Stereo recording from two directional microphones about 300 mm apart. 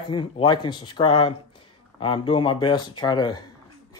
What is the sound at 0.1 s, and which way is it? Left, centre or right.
Speech, centre.